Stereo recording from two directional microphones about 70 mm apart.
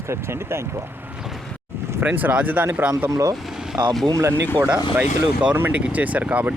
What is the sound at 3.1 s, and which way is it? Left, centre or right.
Speech, right.